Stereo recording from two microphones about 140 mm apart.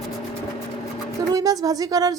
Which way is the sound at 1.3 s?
25° right (ahead or behind).